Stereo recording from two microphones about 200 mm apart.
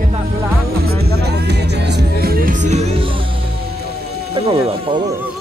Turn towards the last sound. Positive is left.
turn(degrees=-25)  # may be behind; listen again after turning